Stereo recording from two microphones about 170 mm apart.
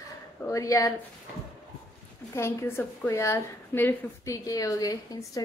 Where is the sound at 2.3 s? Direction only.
15° left (ahead or behind).